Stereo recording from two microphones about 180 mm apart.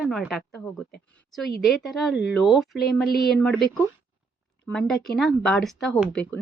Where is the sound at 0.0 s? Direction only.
Centre (ahead or behind).